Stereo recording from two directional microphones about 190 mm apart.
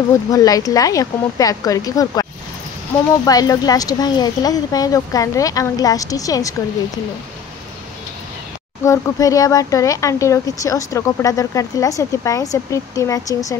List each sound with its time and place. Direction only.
0.3 s speech: 20° left (ahead or behind)
3.3 s speech: 20° left (ahead or behind)
8.8 s speech: 15° left (ahead or behind)